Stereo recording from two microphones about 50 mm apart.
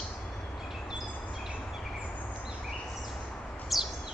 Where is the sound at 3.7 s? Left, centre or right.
Centre.